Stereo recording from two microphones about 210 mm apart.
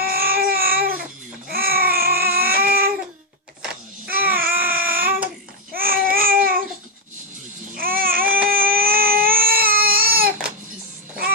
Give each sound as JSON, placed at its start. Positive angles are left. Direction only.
{"t": 0.0, "sound": "baby cry", "side_deg": -45}
{"t": 4.0, "sound": "a sound", "side_deg": -45}
{"t": 4.4, "sound": "baby cry", "side_deg": -10}
{"t": 4.7, "sound": "child singing", "side_deg": -45}
{"t": 5.7, "sound": "babbling", "side_deg": -45}
{"t": 7.8, "sound": "baby cry", "side_deg": -45}